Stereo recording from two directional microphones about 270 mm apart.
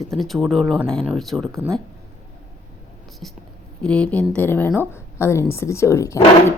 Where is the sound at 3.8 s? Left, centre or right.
Centre.